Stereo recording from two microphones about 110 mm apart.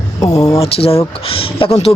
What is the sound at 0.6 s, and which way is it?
Speech, 60° left (ahead or behind).